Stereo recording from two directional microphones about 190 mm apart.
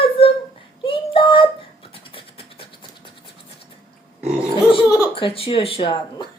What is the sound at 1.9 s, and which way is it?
Vehicle, 30° left (ahead or behind).